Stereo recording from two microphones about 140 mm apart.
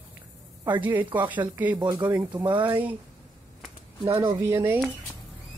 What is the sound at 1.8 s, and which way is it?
Speech, 30° right (ahead or behind).